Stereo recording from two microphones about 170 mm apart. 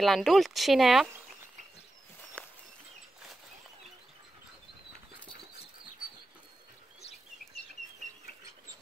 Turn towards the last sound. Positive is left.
turn(degrees=40)  # may be behind; listen again after turning